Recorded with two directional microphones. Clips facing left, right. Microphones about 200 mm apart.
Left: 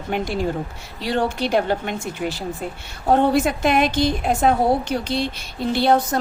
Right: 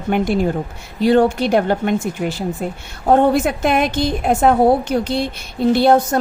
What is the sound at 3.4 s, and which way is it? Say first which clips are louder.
A woman's voice: right 2 dB; 55° right (ahead or behind).